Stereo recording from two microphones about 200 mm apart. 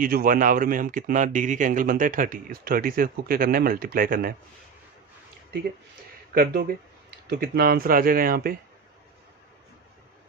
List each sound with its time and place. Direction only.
0.0 s speech: 45° right (ahead or behind)
6.3 s speech: 50° right (ahead or behind)